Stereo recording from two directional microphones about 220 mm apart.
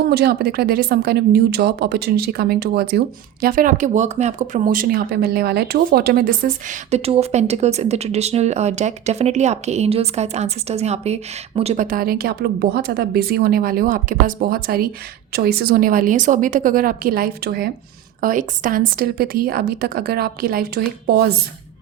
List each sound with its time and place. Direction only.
0.1 s a woman's voice: 45° right (ahead or behind)